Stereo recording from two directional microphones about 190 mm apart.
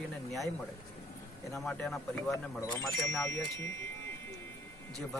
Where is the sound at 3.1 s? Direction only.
15° left (ahead or behind).